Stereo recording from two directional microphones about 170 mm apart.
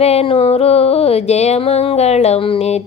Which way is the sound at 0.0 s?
40° left (ahead or behind).